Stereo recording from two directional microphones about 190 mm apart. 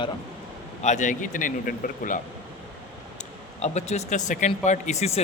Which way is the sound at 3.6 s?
35° left (ahead or behind).